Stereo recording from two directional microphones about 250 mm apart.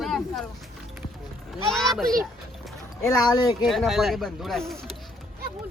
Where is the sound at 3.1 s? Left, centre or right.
Centre.